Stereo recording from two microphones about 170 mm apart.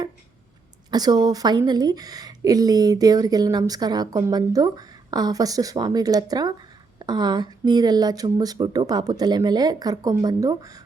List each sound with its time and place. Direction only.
0.9 s a woman's voice: 25° right (ahead or behind)